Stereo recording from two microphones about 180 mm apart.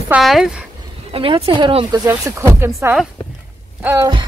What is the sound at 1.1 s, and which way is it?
Speech, 30° right (ahead or behind).